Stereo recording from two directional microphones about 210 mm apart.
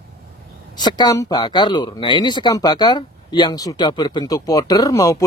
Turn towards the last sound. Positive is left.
turn(degrees=15)  # may be behind; listen again after turning